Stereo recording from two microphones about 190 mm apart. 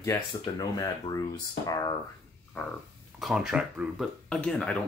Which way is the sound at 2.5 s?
10° left (ahead or behind).